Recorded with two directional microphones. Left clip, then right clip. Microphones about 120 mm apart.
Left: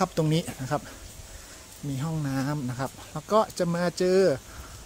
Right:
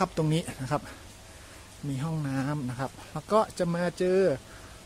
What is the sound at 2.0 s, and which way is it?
Speech, 20° left (ahead or behind).